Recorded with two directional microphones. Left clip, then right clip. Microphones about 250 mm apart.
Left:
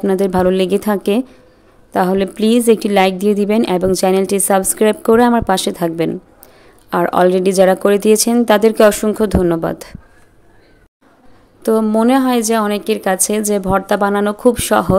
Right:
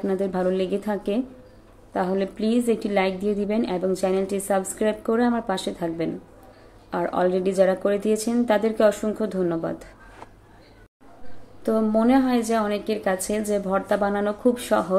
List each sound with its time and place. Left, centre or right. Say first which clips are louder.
0.0 s a woman's voice: left 10 dB; left
11.6 s a woman's voice: left 8 dB; left